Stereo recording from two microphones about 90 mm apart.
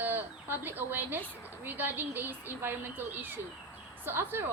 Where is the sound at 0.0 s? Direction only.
20° right (ahead or behind).